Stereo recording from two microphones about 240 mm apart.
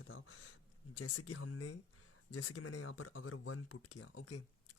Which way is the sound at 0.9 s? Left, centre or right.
Left.